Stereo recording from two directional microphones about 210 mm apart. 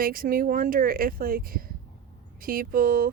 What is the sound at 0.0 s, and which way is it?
Speech, 45° right (ahead or behind).